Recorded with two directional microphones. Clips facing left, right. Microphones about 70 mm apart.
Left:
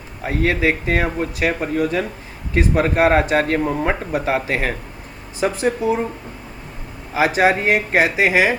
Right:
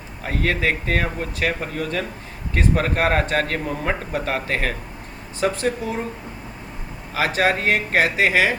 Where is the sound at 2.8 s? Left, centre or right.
Centre.